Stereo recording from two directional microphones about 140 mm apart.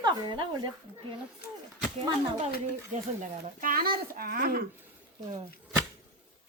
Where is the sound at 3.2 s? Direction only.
80° right.